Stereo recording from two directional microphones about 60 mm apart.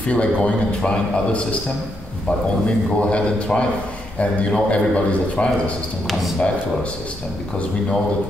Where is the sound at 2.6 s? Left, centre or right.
Centre.